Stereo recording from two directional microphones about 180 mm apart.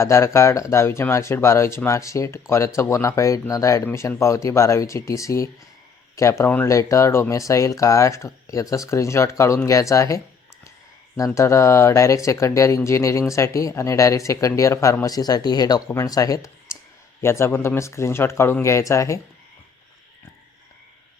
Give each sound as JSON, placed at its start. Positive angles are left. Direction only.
{"t": 0.0, "sound": "speech", "side_deg": 15}
{"t": 11.3, "sound": "speech", "side_deg": 15}